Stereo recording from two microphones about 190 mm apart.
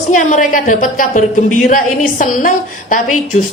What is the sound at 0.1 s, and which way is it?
A woman's voice, 45° left (ahead or behind).